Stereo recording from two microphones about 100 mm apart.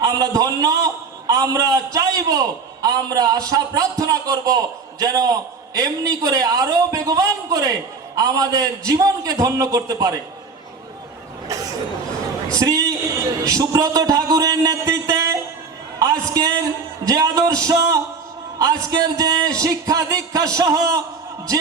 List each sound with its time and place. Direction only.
0.0 s a man's voice: 40° right (ahead or behind)
11.4 s cough: 35° right (ahead or behind)
12.5 s a sound: 35° right (ahead or behind)
17.1 s a man's voice: 35° right (ahead or behind)